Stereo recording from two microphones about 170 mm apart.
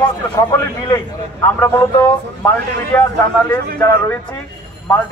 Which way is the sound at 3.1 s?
15° left (ahead or behind).